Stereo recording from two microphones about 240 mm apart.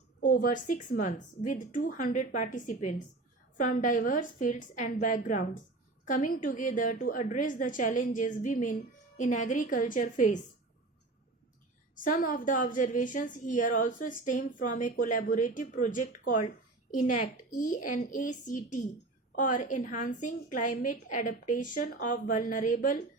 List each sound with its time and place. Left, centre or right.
0.2 s a woman's voice: left
12.0 s a woman's voice: left